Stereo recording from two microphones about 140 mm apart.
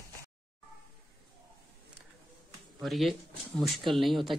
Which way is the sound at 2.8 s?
Centre (ahead or behind).